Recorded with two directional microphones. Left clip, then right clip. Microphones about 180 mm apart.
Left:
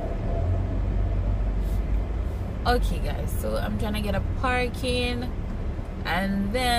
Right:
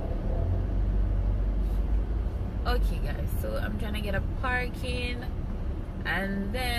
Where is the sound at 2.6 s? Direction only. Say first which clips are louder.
Left 8 dB; 15° left (ahead or behind).